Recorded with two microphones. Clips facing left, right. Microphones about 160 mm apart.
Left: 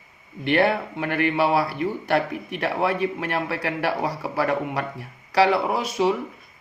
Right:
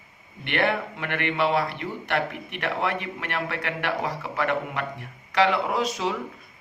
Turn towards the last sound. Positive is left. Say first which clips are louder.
# left 3 dB
turn(degrees=35)  # may be behind; listen again after turning